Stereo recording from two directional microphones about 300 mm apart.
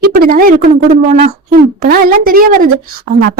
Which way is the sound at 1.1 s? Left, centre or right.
Right.